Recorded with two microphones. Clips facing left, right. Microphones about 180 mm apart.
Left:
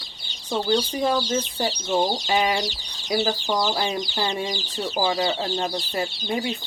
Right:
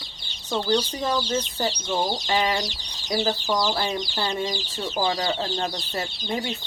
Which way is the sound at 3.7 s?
25° left (ahead or behind).